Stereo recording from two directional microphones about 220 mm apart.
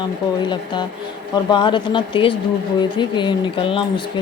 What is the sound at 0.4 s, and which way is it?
Speech, 20° left (ahead or behind).